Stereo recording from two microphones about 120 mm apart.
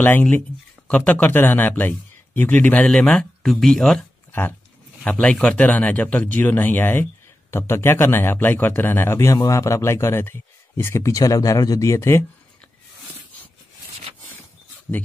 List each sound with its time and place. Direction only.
0.0 s speech: 15° left (ahead or behind)
4.3 s speech: 15° left (ahead or behind)